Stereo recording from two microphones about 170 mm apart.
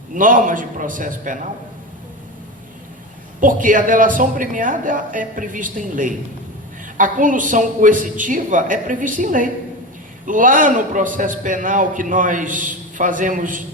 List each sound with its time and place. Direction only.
0.1 s a man's voice: 50° right (ahead or behind)
3.4 s a man's voice: 50° right (ahead or behind)